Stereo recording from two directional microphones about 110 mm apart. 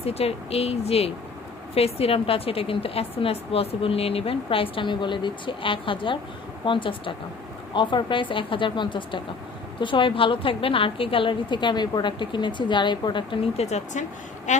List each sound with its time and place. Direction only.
0.0 s a woman's voice: 65° left (ahead or behind); by 13.4 s 45° left (ahead or behind)
13.6 s speech: 85° left
14.5 s a sound: 90° left